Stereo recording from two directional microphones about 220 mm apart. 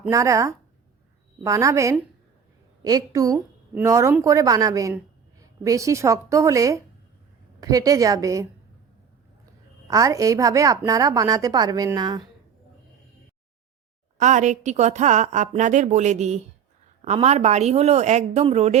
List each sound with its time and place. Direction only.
0.0 s a woman's voice: 15° right (ahead or behind)
9.8 s a woman's voice: 15° right (ahead or behind)
14.2 s a woman's voice: 35° right (ahead or behind)